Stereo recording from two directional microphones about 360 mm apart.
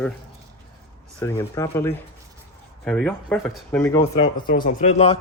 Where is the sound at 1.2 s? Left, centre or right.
Centre.